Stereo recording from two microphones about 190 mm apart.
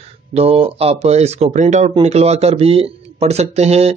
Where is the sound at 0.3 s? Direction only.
30° right (ahead or behind).